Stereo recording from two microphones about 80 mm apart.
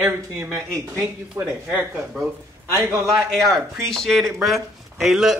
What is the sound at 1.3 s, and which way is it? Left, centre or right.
Speech, centre.